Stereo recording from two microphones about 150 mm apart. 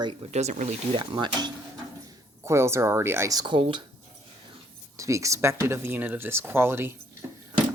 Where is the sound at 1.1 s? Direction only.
30° right (ahead or behind).